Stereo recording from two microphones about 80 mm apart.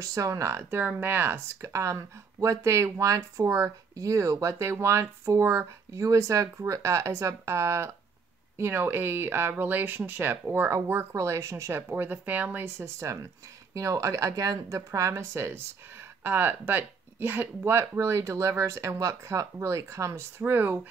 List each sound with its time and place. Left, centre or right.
0.0 s speech: right
1.6 s speech: right
11.9 s speech: right